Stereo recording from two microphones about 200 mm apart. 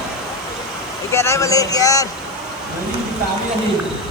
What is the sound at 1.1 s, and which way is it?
Speech, 15° left (ahead or behind).